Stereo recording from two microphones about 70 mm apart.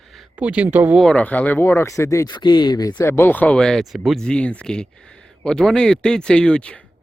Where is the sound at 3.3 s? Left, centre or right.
Left.